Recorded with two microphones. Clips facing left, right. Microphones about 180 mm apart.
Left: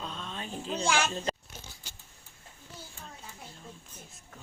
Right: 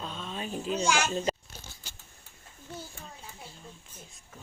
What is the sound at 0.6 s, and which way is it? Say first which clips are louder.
Speech: right 2 dB; 30° left (ahead or behind).